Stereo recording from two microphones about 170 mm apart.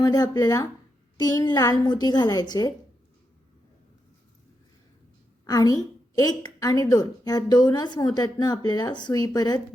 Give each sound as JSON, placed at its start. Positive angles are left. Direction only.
{"t": 0.0, "sound": "a woman's voice", "side_deg": 20}
{"t": 5.5, "sound": "a woman's voice", "side_deg": 20}